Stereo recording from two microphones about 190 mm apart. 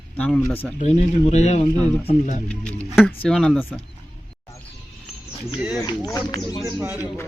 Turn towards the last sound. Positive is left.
turn(degrees=-10)  # may be behind; listen again after turning